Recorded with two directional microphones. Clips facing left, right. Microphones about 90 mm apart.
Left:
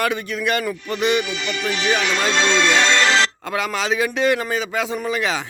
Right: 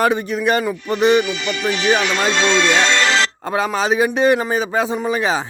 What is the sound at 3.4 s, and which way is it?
Speech, 30° right (ahead or behind).